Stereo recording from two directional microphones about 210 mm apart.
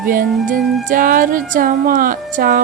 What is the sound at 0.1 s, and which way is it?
Music, 40° right (ahead or behind).